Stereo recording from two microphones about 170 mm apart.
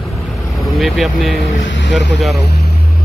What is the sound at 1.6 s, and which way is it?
Speech, 90° left.